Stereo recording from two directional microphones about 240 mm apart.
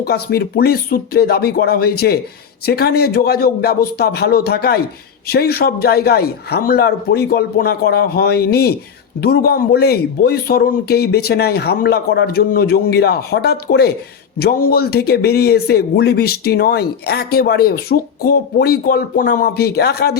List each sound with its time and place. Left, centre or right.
0.0 s speech: left